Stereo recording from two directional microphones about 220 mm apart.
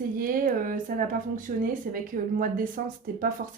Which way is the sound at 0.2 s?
40° right (ahead or behind).